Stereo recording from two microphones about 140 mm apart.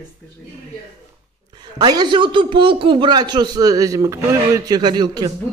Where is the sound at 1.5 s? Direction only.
30° right (ahead or behind).